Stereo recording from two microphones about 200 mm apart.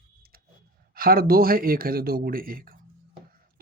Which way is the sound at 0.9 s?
45° right (ahead or behind).